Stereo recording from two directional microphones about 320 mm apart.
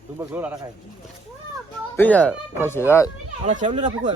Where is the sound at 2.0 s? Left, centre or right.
Centre.